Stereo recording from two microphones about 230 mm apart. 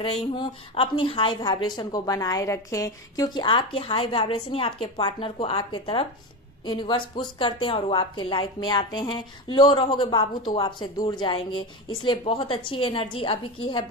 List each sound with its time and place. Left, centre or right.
0.0 s a woman's voice: left